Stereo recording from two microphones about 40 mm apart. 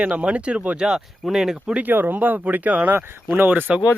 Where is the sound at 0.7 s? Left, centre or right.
Centre.